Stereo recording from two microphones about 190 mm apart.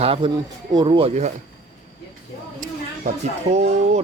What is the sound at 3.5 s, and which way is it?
Speech, 35° right (ahead or behind).